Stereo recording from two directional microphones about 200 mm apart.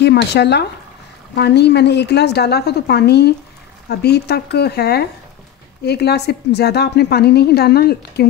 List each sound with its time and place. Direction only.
0.0 s a woman's voice: 60° left (ahead or behind)